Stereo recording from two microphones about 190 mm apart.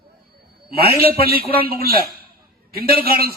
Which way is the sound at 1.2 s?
55° right (ahead or behind).